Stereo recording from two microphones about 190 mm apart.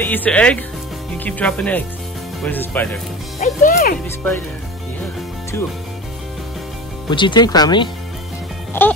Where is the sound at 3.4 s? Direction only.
40° left (ahead or behind).